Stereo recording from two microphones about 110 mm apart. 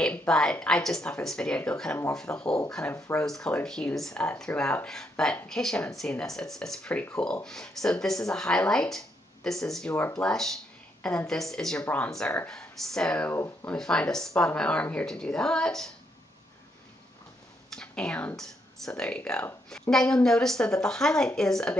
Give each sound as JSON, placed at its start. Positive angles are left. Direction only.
{"t": 0.0, "sound": "speech", "side_deg": 10}
{"t": 2.9, "sound": "speech", "side_deg": 25}
{"t": 3.3, "sound": "speech", "side_deg": 5}
{"t": 12.1, "sound": "speech", "side_deg": 5}
{"t": 17.6, "sound": "speech", "side_deg": 10}